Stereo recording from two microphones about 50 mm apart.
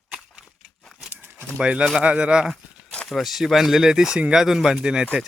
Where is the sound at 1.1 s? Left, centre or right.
Right.